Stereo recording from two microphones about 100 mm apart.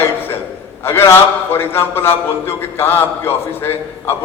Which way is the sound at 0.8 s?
25° left (ahead or behind).